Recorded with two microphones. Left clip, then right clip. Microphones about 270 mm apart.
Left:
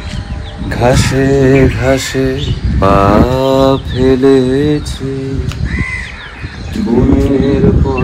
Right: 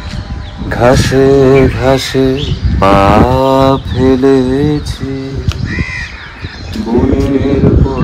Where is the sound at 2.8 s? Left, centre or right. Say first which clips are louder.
Right 2 dB; right.